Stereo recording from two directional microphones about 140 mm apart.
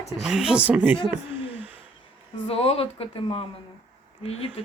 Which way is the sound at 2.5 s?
45° left (ahead or behind).